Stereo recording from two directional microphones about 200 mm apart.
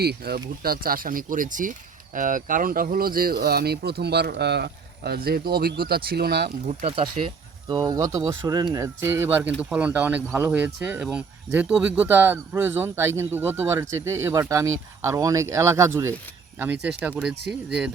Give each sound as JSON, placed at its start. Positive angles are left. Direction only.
{"t": 0.0, "sound": "speech", "side_deg": -50}
{"t": 6.7, "sound": "speech", "side_deg": -30}